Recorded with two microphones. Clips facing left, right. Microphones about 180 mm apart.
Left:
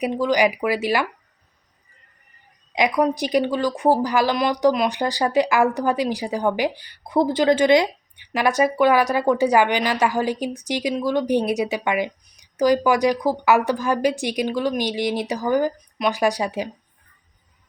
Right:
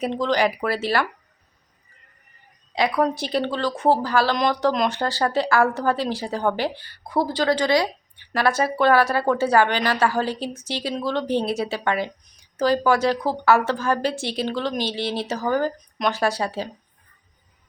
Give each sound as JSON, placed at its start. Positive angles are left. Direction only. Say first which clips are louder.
{"t": 0.0, "sound": "speech", "louder": "left 2 dB", "side_deg": 10}
{"t": 2.7, "sound": "speech", "louder": "left 2 dB", "side_deg": 15}